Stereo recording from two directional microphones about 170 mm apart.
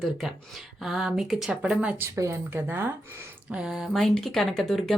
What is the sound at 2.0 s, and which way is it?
Speech, 20° right (ahead or behind).